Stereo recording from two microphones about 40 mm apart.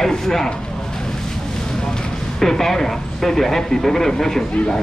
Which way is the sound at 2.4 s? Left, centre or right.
Centre.